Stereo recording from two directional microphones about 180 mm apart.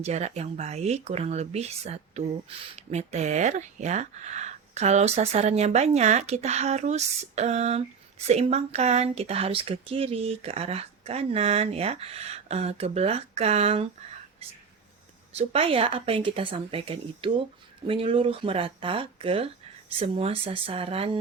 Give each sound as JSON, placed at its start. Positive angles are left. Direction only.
{"t": 0.0, "sound": "speech", "side_deg": -40}
{"t": 15.4, "sound": "speech", "side_deg": -35}